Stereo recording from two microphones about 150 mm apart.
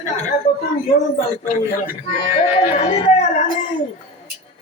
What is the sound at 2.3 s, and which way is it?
Speech, 50° left (ahead or behind).